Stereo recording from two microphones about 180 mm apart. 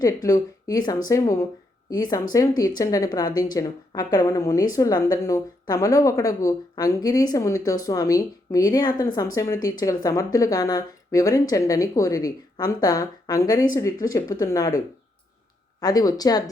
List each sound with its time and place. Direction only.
0.0 s a woman's voice: 20° left (ahead or behind)
15.8 s a woman's voice: 20° left (ahead or behind)